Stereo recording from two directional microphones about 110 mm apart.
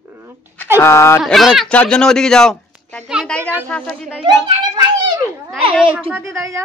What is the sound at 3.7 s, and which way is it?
Speech, 10° left (ahead or behind).